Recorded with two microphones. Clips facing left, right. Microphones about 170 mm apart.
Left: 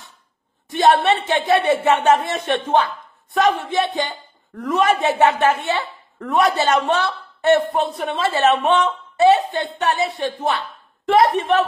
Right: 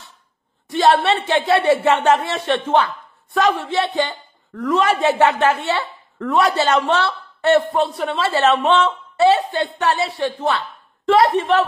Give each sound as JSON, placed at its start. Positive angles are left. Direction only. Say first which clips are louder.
{"t": 0.7, "sound": "a woman's voice", "louder": "even", "side_deg": 20}